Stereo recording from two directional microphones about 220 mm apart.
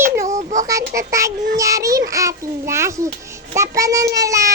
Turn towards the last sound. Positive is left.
turn(degrees=-15)  # may be behind; listen again after turning